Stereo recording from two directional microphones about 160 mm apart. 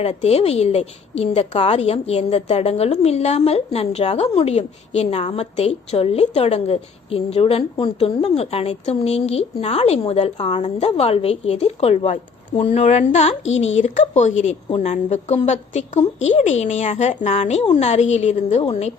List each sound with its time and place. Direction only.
0.0 s a woman's voice: 40° left (ahead or behind)